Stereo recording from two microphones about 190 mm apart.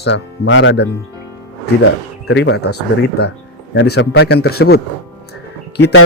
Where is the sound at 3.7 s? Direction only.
85° left; by 4.8 s 55° left (ahead or behind).